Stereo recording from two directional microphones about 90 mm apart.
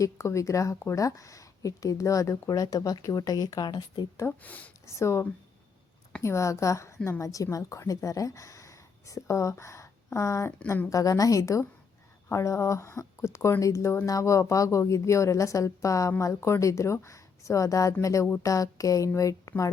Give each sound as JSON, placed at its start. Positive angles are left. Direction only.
{"t": 0.0, "sound": "speech", "side_deg": 35}
{"t": 4.3, "sound": "speech", "side_deg": 15}
{"t": 4.9, "sound": "speech", "side_deg": 30}
{"t": 6.2, "sound": "a woman's voice", "side_deg": 35}